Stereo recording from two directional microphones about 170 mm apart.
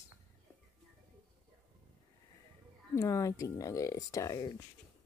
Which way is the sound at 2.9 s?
20° left (ahead or behind).